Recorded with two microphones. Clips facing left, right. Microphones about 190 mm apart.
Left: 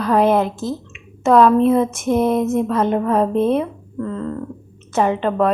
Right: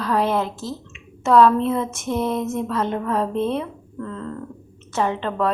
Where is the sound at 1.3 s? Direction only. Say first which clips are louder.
Left 3 dB; 15° left (ahead or behind).